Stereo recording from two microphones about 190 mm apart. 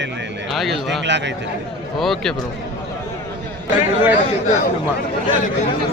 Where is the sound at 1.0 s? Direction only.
70° right (ahead or behind).